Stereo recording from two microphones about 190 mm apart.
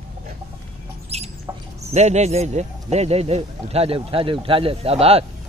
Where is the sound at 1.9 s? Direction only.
35° right (ahead or behind).